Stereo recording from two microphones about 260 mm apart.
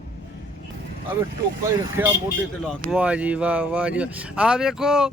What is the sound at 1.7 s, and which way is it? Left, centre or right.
A man's voice, centre.